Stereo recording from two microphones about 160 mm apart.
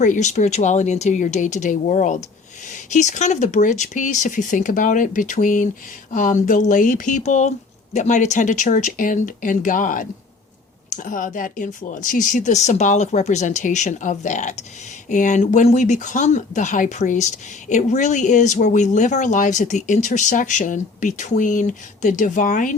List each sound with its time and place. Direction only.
0.0 s speech: 50° left (ahead or behind)